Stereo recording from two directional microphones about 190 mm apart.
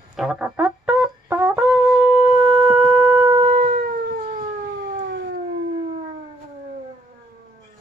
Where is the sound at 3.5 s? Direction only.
40° right (ahead or behind).